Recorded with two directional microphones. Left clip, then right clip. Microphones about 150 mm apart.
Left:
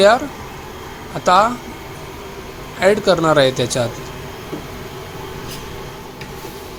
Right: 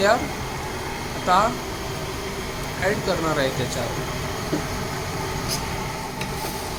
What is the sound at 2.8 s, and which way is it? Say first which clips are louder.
Speech: left 10 dB; 55° left (ahead or behind).